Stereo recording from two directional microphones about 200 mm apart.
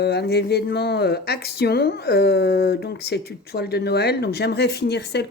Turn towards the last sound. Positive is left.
turn(degrees=55)  # may be behind; listen again after turning